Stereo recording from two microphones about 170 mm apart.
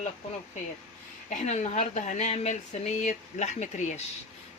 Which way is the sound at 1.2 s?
45° left (ahead or behind).